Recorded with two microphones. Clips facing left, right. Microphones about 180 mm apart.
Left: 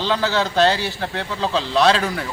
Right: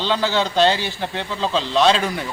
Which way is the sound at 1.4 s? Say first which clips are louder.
Even; 10° left (ahead or behind).